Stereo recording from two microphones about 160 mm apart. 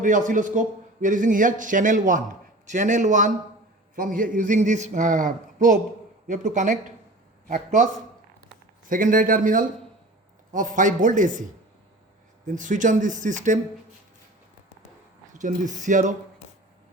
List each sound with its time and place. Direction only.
0.0 s a man's voice: 55° right (ahead or behind)
8.9 s a man's voice: 55° right (ahead or behind)
12.5 s a man's voice: 55° right (ahead or behind)
15.3 s a man's voice: 50° right (ahead or behind)